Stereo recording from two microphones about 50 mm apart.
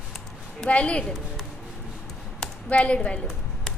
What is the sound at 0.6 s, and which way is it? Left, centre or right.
Speech, left.